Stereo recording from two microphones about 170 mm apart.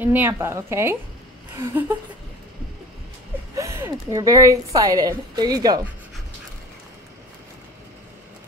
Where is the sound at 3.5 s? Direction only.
15° right (ahead or behind).